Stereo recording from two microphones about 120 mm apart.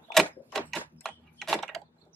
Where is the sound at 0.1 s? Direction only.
Centre (ahead or behind).